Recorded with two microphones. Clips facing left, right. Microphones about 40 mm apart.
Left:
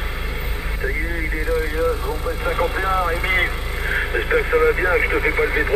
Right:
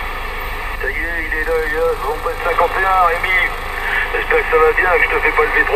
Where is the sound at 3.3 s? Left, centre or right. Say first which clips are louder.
Right 4 dB; right.